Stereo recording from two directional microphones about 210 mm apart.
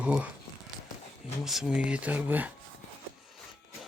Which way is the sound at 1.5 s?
5° right (ahead or behind).